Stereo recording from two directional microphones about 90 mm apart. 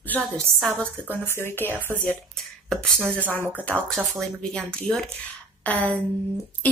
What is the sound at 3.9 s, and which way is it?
A woman's voice, 5° left (ahead or behind).